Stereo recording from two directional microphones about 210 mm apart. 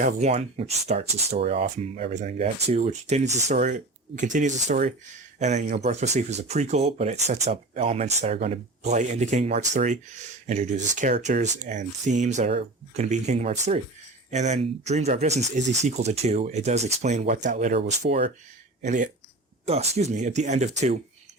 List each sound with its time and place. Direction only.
0.0 s speech: 30° right (ahead or behind)